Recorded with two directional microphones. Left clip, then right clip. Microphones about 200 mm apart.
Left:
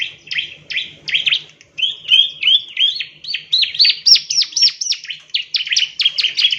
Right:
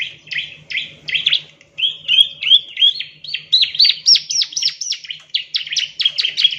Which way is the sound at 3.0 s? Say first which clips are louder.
Left 2 dB; 45° left (ahead or behind).